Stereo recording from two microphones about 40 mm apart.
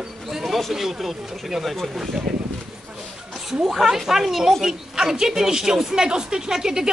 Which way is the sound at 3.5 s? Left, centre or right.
Centre.